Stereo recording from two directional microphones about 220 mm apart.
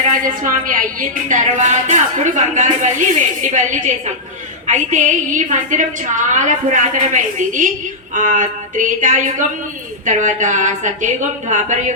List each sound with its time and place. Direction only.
0.1 s a woman's voice: 40° right (ahead or behind)